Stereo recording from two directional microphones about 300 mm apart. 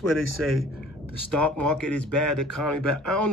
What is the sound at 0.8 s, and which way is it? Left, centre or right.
Speech, right.